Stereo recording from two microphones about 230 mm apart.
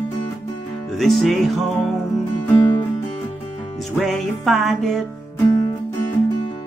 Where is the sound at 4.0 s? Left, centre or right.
Centre.